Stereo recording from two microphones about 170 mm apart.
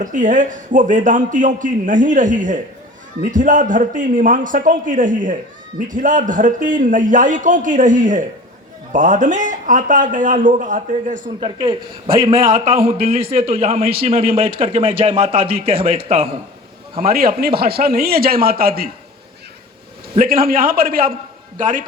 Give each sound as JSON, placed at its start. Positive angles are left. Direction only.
{"t": 0.0, "sound": "a man's voice", "side_deg": -50}
{"t": 12.8, "sound": "speech", "side_deg": -60}
{"t": 13.6, "sound": "speech", "side_deg": -35}
{"t": 16.9, "sound": "speech", "side_deg": -60}
{"t": 20.1, "sound": "a man's voice", "side_deg": -60}